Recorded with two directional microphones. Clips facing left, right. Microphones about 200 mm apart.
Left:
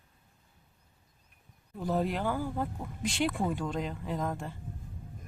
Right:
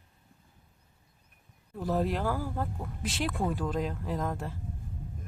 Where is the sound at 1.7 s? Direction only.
Centre (ahead or behind).